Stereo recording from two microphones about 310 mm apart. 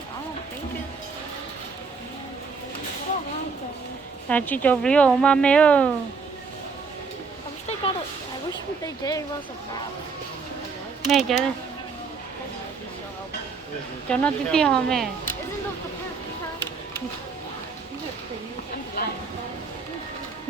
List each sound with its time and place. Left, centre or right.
4.3 s speech: centre
7.7 s a sound: centre
8.8 s speech: centre
11.1 s speech: centre
14.1 s speech: centre
19.0 s speech: left